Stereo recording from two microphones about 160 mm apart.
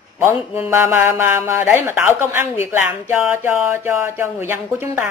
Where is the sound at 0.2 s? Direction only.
15° right (ahead or behind).